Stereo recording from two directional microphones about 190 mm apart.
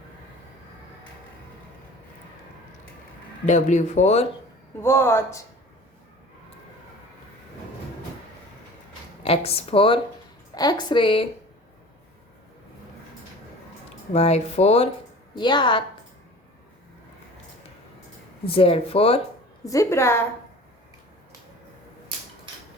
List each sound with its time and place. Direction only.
3.4 s speech: 40° left (ahead or behind)
4.8 s speech: 15° left (ahead or behind)
9.2 s speech: 30° left (ahead or behind)
14.1 s speech: 35° left (ahead or behind)
15.4 s speech: 25° left (ahead or behind)
18.4 s speech: 30° left (ahead or behind)
19.6 s speech: 15° left (ahead or behind)